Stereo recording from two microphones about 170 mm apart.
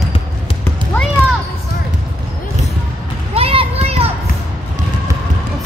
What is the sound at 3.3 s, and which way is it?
Children playing, 35° right (ahead or behind).